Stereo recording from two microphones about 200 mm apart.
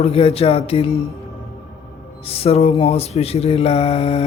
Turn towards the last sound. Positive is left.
turn(degrees=30)  # may be behind; listen again after turning